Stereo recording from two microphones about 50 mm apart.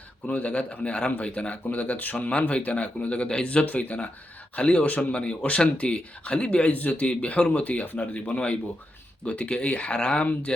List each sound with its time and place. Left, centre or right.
0.3 s speech: left